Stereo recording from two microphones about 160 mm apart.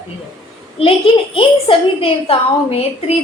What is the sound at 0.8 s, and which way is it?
A woman's voice, 35° left (ahead or behind).